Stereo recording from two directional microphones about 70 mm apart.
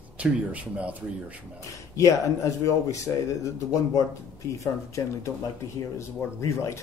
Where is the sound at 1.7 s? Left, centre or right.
Left.